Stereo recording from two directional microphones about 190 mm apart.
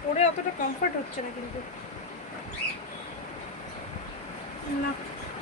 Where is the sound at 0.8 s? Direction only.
45° left (ahead or behind).